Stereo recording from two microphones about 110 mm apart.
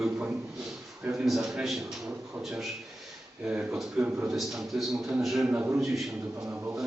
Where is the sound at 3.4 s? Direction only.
5° right (ahead or behind).